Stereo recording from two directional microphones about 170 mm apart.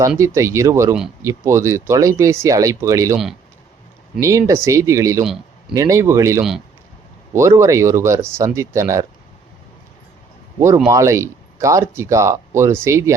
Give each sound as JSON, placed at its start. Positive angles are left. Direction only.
{"t": 0.2, "sound": "speech", "side_deg": -15}
{"t": 4.2, "sound": "speech", "side_deg": -20}
{"t": 10.8, "sound": "speech", "side_deg": -15}